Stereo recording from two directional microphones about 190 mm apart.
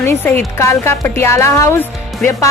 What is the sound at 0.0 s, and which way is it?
Speech, 10° left (ahead or behind).